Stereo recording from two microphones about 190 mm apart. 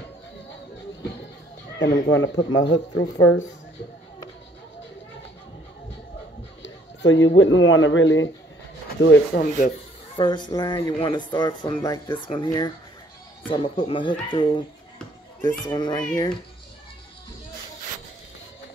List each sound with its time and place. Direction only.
1.8 s speech: 55° left (ahead or behind)
2.0 s speech: 80° left
6.6 s a man's voice: 75° left (ahead or behind)
9.0 s speech: 70° left (ahead or behind)
10.1 s speech: 25° left (ahead or behind)